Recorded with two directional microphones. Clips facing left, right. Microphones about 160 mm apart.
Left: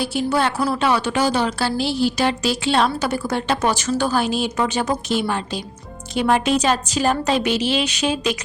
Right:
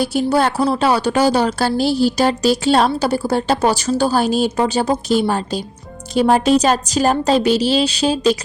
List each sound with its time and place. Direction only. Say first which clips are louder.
0.0 s a woman's voice: right 4 dB; 40° right (ahead or behind)